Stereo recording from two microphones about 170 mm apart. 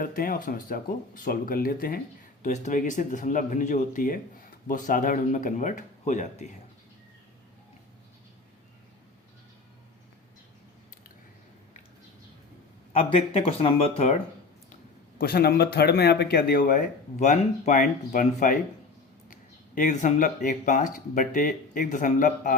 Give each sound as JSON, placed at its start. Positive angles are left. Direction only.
{"t": 0.0, "sound": "speech", "side_deg": 55}
{"t": 2.4, "sound": "speech", "side_deg": 45}
{"t": 12.9, "sound": "speech", "side_deg": 35}
{"t": 15.2, "sound": "speech", "side_deg": 65}